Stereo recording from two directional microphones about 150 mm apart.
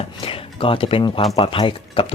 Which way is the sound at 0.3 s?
35° left (ahead or behind).